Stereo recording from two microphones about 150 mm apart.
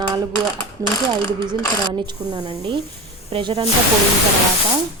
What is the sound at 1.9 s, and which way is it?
A woman's voice, 30° right (ahead or behind).